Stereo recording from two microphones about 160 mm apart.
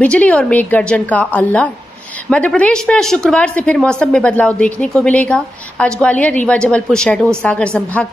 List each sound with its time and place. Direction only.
0.0 s a woman's voice: 10° left (ahead or behind)